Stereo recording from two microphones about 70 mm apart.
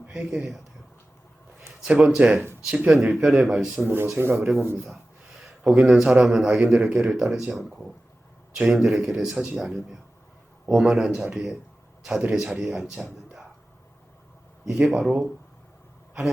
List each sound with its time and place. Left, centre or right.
0.1 s speech: centre
1.9 s speech: centre
2.9 s speech: centre
3.8 s speech: right
4.4 s a man's voice: centre
9.6 s speech: centre
12.2 s speech: centre
14.6 s speech: centre